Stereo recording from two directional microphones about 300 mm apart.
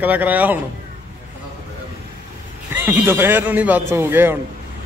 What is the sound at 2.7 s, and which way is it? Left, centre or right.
Speech, centre.